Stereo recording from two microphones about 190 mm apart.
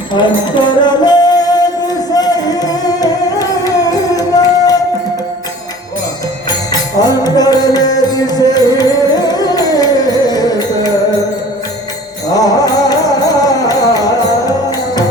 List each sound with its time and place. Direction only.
0.5 s music: 25° left (ahead or behind)
7.0 s music: 20° left (ahead or behind)
12.3 s music: 20° left (ahead or behind)